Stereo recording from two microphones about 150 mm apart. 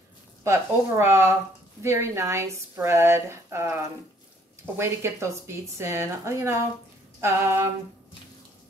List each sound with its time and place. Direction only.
0.4 s speech: 15° right (ahead or behind)